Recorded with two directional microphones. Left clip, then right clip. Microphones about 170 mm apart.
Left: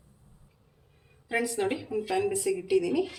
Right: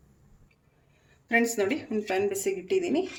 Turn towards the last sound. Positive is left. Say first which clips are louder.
# even
turn(degrees=-40)  # may be behind; listen again after turning